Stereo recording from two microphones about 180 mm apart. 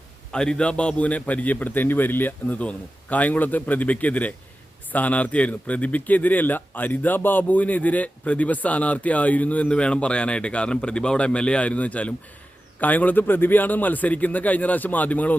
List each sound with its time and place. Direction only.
0.3 s a man's voice: 5° left (ahead or behind)